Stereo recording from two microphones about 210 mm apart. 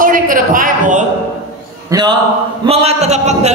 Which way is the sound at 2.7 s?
30° right (ahead or behind).